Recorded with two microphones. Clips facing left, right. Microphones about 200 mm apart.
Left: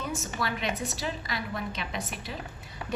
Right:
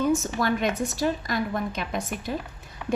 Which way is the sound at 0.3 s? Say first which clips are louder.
Right 7 dB; 45° right (ahead or behind).